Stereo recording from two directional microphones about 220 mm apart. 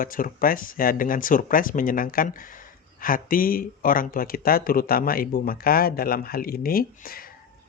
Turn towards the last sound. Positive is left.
turn(degrees=40)  # may be behind; listen again after turning